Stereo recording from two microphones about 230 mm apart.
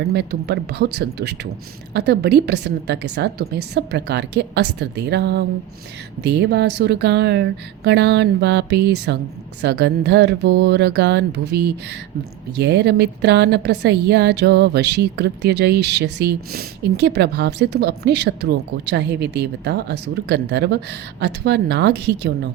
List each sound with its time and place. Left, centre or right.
0.1 s a woman's voice: right